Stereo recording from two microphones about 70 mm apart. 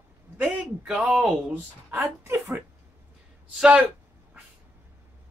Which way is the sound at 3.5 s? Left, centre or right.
Centre.